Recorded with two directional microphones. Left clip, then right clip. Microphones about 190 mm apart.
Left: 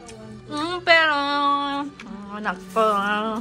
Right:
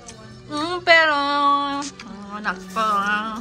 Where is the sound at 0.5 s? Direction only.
5° right (ahead or behind).